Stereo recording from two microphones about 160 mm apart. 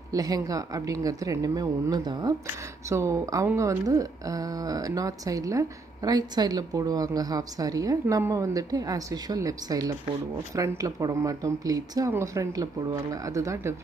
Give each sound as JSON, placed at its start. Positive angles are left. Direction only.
{"t": 0.1, "sound": "a woman's voice", "side_deg": -20}